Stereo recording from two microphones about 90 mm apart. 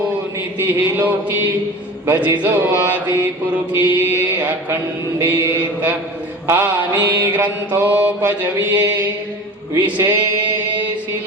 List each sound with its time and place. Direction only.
0.6 s mantra: 20° right (ahead or behind)
6.5 s mantra: 20° right (ahead or behind)
9.7 s a sound: 25° right (ahead or behind)